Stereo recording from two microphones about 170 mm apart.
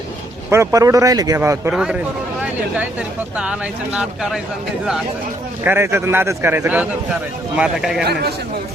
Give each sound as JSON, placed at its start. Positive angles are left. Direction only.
{"t": 0.5, "sound": "speech", "side_deg": -15}
{"t": 1.7, "sound": "speech", "side_deg": -5}
{"t": 3.3, "sound": "speech", "side_deg": -5}
{"t": 5.6, "sound": "a man's voice", "side_deg": -15}
{"t": 8.0, "sound": "a man's voice", "side_deg": -70}